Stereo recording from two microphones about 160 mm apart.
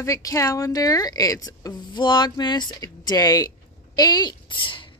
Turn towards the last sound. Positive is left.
turn(degrees=30)  # may be behind; listen again after turning